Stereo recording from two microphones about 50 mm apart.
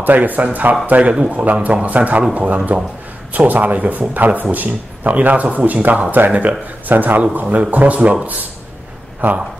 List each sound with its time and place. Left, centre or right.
0.0 s a man's voice: right